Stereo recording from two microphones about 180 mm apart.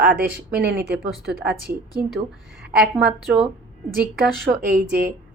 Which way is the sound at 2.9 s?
5° right (ahead or behind).